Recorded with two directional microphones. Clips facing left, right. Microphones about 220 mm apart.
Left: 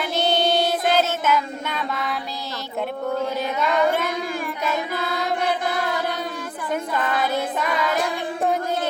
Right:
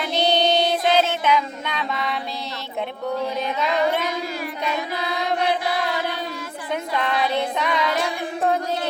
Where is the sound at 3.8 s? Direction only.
50° left (ahead or behind).